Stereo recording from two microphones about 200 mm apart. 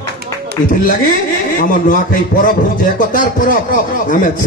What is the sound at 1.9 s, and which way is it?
A man's voice, 45° left (ahead or behind).